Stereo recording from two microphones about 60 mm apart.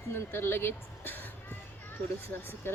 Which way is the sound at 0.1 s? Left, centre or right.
Left.